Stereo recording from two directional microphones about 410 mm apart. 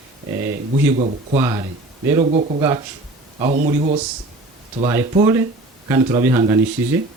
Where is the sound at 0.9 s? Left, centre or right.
Centre.